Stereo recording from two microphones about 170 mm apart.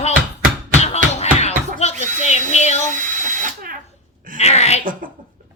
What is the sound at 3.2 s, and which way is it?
Drill, 50° right (ahead or behind).